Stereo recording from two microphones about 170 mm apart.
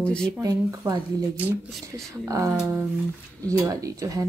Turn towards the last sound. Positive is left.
turn(degrees=-20)  # may be behind; listen again after turning